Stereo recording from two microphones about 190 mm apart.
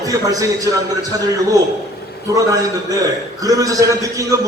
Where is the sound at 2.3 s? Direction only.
15° right (ahead or behind).